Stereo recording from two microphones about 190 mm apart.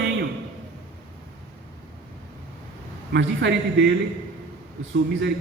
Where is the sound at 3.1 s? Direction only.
65° right (ahead or behind).